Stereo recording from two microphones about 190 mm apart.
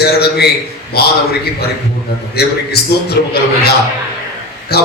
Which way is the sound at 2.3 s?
55° left (ahead or behind).